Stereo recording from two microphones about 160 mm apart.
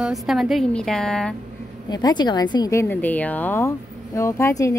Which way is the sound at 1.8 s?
25° left (ahead or behind).